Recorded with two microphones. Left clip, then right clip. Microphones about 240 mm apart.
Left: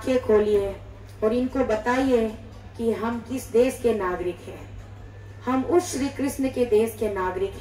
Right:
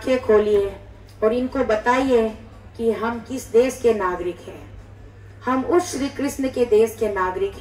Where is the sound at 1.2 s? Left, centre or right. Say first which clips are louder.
Right 3 dB; right.